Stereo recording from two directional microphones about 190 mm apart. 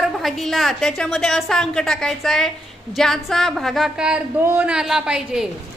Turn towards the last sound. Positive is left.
turn(degrees=-5)  # may be behind; listen again after turning